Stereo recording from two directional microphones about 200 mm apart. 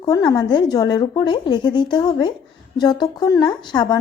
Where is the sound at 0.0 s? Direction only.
20° left (ahead or behind).